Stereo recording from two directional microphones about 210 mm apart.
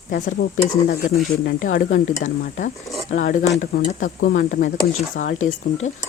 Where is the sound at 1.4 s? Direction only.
40° left (ahead or behind).